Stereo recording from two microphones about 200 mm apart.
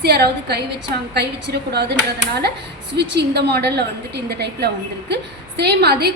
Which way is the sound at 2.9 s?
55° right (ahead or behind).